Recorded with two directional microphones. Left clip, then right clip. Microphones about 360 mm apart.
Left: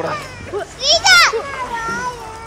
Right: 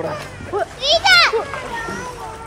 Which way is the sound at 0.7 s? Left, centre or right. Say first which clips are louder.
Left 2 dB; centre.